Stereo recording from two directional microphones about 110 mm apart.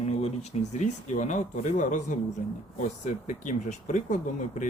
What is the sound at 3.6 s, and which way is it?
Speech, 90° left.